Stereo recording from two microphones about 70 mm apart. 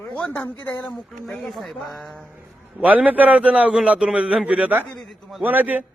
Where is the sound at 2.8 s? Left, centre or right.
Right.